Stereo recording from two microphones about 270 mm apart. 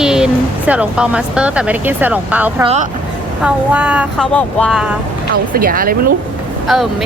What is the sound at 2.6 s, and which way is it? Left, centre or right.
Speech, right.